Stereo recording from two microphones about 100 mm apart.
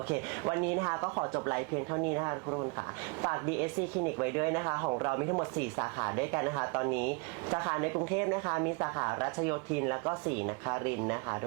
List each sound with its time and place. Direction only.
0.5 s speech: 20° right (ahead or behind)